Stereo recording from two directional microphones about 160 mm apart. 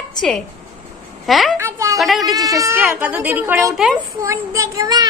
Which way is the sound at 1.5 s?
15° right (ahead or behind).